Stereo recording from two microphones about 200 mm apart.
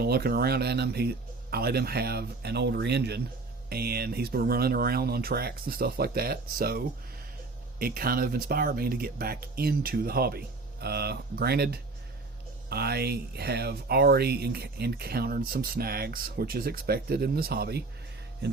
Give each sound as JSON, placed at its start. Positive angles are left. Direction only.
{"t": 0.0, "sound": "speech", "side_deg": -50}